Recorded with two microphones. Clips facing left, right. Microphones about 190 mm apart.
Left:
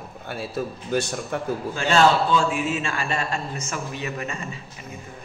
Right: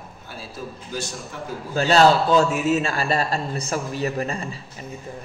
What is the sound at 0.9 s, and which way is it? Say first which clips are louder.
Speech: left 8 dB; 60° left (ahead or behind).